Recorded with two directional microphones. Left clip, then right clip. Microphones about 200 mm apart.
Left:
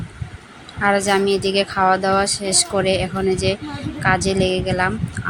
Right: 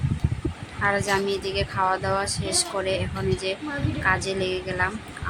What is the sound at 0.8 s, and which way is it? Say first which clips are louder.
Speech: left 6 dB; 15° left (ahead or behind).